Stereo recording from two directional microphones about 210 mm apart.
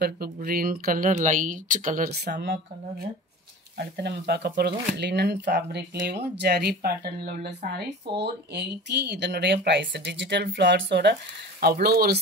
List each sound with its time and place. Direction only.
0.0 s speech: 45° right (ahead or behind)